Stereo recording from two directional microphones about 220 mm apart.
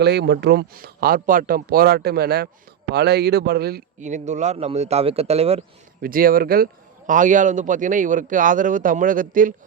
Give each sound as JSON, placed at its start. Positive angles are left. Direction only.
{"t": 0.0, "sound": "speech", "side_deg": -50}
{"t": 6.0, "sound": "speech", "side_deg": -40}